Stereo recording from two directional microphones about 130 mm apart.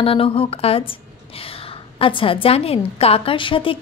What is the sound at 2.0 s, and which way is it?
Speech, 45° left (ahead or behind).